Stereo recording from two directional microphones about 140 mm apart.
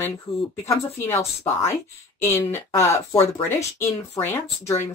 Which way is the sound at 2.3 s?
15° left (ahead or behind).